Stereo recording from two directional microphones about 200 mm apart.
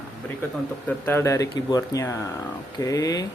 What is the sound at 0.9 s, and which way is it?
Speech, 10° left (ahead or behind).